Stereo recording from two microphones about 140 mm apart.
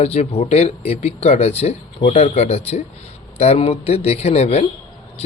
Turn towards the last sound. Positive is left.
turn(degrees=50)  # may be behind; listen again after turning